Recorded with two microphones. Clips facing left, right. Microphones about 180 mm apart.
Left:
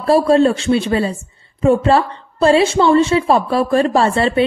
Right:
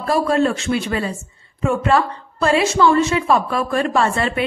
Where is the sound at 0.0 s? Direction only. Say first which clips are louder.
Left 6 dB; 30° left (ahead or behind).